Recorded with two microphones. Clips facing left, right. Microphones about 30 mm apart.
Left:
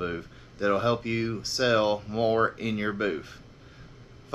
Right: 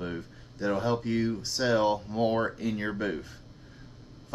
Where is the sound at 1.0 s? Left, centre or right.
Left.